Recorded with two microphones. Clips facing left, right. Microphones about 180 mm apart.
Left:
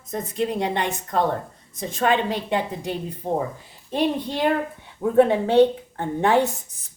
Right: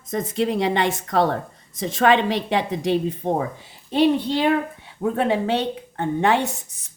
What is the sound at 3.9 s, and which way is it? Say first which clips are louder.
A woman's voice: right 5 dB; 80° right.